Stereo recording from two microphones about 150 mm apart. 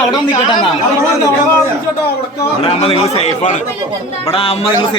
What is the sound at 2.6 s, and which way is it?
A man's voice, 40° left (ahead or behind).